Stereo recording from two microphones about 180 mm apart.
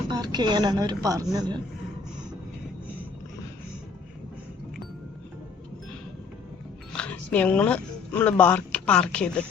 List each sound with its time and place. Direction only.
0.1 s speech: 25° right (ahead or behind)
6.9 s speech: 5° left (ahead or behind)